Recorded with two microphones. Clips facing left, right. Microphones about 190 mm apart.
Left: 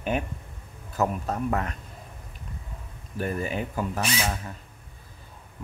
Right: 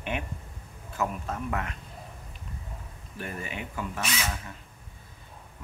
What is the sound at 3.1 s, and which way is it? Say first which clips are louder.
Speech: left 8 dB; 40° left (ahead or behind).